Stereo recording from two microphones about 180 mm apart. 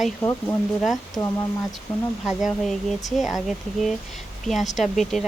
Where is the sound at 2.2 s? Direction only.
Centre (ahead or behind).